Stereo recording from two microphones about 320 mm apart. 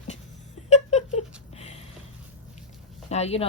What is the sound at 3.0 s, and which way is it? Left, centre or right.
Speech, centre.